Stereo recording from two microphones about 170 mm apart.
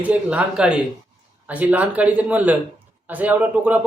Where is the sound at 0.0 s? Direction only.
10° right (ahead or behind).